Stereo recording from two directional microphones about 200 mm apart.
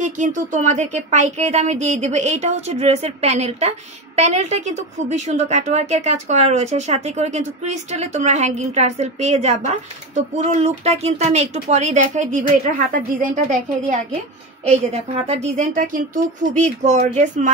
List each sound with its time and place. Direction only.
0.0 s a woman's voice: 40° right (ahead or behind)
15.2 s a woman's voice: 35° right (ahead or behind)